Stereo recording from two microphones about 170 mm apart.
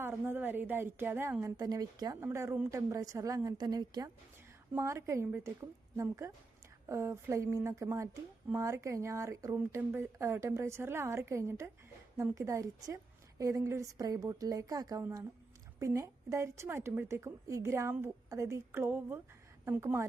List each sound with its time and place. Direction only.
0.0 s a woman's voice: 10° right (ahead or behind)